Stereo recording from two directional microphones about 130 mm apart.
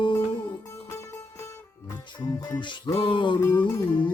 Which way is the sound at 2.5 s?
35° left (ahead or behind).